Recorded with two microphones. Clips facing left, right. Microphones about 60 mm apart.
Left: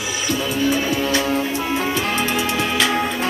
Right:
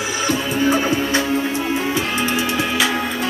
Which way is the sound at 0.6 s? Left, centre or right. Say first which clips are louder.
Right 2 dB; right.